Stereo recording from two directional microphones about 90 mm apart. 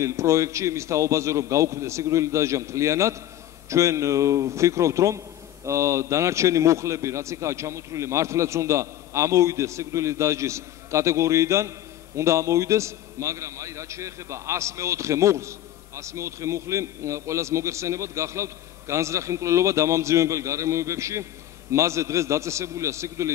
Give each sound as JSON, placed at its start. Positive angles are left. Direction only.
{"t": 0.0, "sound": "a man's voice", "side_deg": -35}